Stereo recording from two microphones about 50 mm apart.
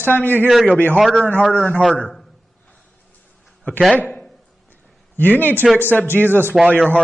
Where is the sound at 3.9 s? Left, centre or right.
Left.